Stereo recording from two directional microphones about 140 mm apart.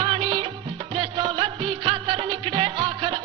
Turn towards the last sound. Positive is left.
turn(degrees=-35)  # may be behind; listen again after turning